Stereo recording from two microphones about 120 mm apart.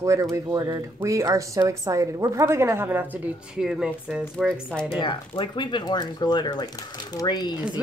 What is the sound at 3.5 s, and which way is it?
Speech, 5° right (ahead or behind).